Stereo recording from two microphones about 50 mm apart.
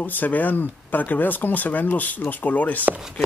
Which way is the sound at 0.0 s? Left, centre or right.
Left.